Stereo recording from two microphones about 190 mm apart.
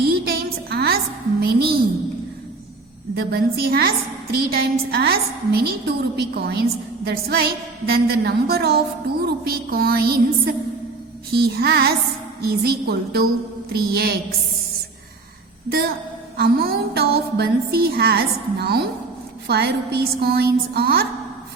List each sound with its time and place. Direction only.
0.0 s a sound: 55° right (ahead or behind)
1.4 s music: 55° right (ahead or behind)
3.2 s music: 55° right (ahead or behind)
16.4 s music: 55° right (ahead or behind)